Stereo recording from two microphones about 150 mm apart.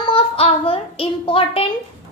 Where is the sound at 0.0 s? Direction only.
35° left (ahead or behind).